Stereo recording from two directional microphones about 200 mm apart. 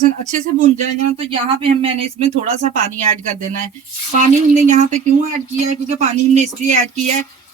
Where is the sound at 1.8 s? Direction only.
30° right (ahead or behind).